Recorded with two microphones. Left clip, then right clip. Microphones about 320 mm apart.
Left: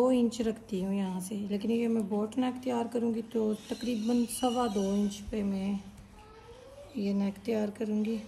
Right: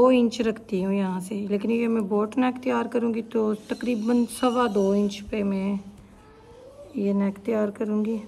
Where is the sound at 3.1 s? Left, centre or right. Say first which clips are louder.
Right 6 dB; right.